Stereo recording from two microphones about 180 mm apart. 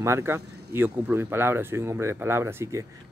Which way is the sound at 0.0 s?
15° right (ahead or behind).